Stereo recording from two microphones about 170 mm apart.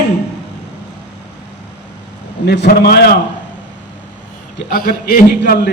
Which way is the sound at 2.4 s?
80° left.